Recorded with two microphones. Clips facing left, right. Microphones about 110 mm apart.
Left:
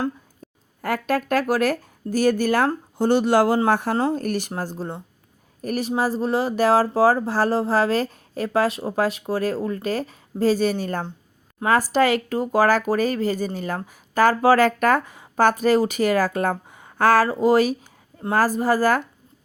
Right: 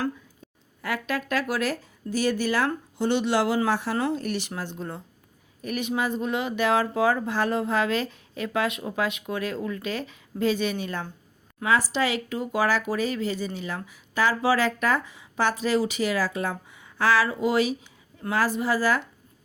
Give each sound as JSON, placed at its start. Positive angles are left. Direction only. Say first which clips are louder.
{"t": 0.8, "sound": "speech", "louder": "left 6 dB", "side_deg": 45}